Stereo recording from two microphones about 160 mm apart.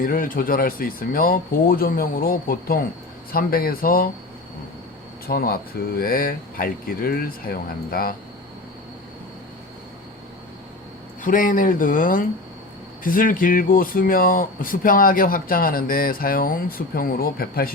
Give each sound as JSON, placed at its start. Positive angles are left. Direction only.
{"t": 0.0, "sound": "speech", "side_deg": 60}
{"t": 5.3, "sound": "speech", "side_deg": 65}
{"t": 11.2, "sound": "speech", "side_deg": 60}